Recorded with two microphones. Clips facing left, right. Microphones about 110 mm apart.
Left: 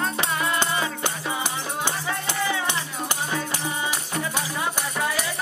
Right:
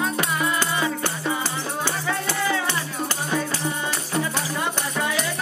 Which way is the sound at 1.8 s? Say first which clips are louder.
Right 2 dB; 15° left (ahead or behind).